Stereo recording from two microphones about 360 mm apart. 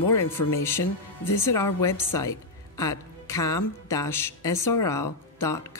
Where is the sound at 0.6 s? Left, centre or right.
Centre.